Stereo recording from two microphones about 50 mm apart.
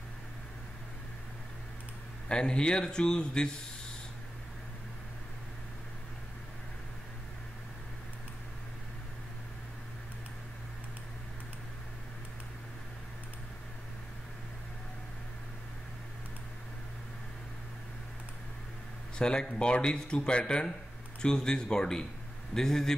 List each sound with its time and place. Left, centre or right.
2.2 s speech: centre
19.1 s a man's voice: centre